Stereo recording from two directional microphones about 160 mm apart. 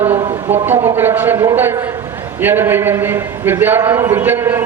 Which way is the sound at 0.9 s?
15° right (ahead or behind).